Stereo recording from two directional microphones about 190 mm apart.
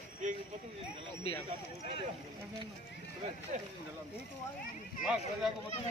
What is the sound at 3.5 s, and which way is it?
Speech, 40° right (ahead or behind).